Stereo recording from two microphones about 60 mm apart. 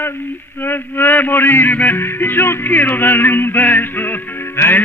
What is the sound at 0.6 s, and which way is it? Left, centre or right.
Male singing, left.